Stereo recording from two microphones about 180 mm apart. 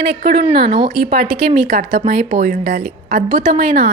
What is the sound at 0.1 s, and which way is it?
Speech, 55° right (ahead or behind).